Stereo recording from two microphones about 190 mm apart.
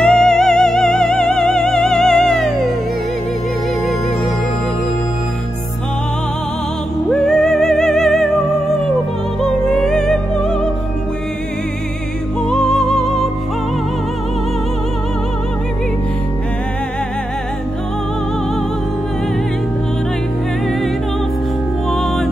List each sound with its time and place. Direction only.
0.0 s music: 5° left (ahead or behind)
7.1 s music: centre (ahead or behind)
9.4 s music: 5° left (ahead or behind)
12.4 s music: centre (ahead or behind)